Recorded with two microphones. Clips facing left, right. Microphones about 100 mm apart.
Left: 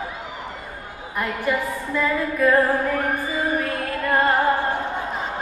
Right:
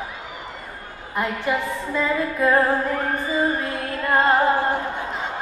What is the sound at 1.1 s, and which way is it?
A woman's voice, 20° right (ahead or behind).